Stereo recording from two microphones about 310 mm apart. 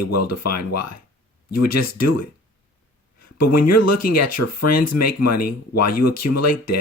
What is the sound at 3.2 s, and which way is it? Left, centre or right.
Speech, left.